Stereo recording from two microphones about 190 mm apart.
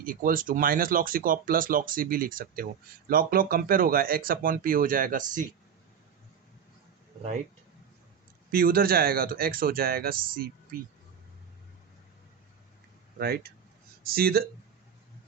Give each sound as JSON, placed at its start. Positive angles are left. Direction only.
{"t": 0.0, "sound": "speech", "side_deg": -45}
{"t": 8.4, "sound": "speech", "side_deg": -50}
{"t": 13.1, "sound": "speech", "side_deg": -55}